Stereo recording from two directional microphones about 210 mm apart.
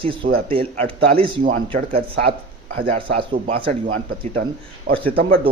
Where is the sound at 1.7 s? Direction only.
45° right (ahead or behind).